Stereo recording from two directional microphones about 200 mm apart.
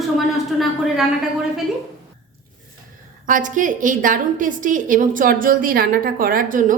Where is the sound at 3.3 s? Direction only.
40° right (ahead or behind).